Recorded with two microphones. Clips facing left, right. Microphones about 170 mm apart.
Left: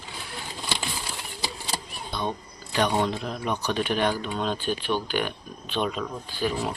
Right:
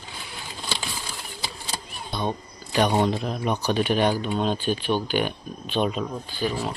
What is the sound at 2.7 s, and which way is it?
Speech, 15° right (ahead or behind).